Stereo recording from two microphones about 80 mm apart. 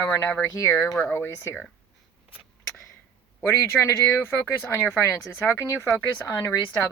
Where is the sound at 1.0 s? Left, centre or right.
Left.